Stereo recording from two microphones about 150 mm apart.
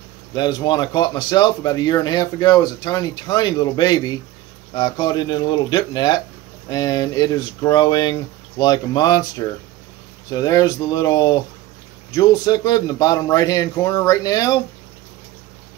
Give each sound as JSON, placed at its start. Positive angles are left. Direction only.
{"t": 0.3, "sound": "speech", "side_deg": 30}